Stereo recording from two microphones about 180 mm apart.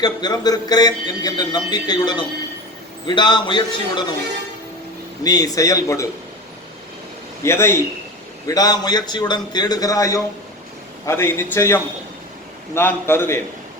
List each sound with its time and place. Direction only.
0.0 s a man's voice: 20° left (ahead or behind)
5.2 s a man's voice: 20° left (ahead or behind)
7.4 s a man's voice: 15° left (ahead or behind)